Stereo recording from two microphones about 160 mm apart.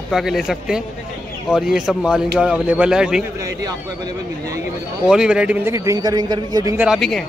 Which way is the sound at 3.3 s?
20° right (ahead or behind).